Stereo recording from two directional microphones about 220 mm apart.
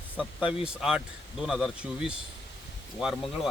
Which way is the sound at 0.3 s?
5° right (ahead or behind).